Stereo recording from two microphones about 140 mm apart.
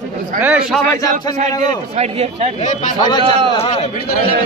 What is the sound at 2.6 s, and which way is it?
Speech, 65° left (ahead or behind).